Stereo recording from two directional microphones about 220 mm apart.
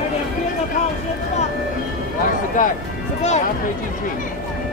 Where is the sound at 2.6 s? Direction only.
35° left (ahead or behind).